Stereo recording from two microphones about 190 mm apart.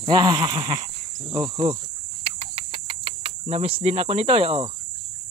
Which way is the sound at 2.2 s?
30° right (ahead or behind).